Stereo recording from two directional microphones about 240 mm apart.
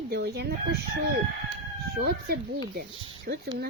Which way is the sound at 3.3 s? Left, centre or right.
Right.